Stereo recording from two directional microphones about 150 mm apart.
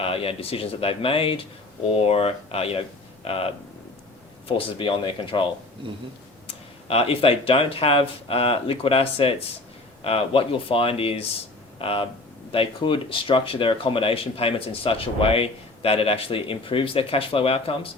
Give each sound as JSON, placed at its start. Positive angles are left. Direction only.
{"t": 0.0, "sound": "speech", "side_deg": 40}
{"t": 6.8, "sound": "speech", "side_deg": 40}